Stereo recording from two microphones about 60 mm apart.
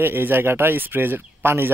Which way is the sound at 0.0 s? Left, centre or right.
Right.